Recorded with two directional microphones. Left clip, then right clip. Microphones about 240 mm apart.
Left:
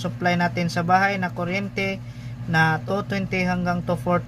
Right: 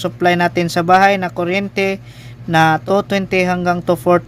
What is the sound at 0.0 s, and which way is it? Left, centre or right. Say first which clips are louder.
Speech: right 8 dB; right.